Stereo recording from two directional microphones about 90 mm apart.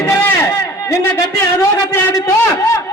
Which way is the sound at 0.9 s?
30° left (ahead or behind).